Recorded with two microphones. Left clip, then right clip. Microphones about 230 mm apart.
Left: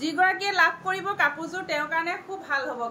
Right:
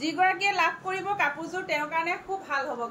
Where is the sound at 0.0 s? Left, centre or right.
Left.